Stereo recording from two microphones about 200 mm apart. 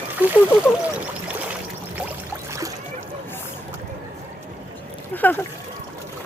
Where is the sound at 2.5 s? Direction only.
15° right (ahead or behind).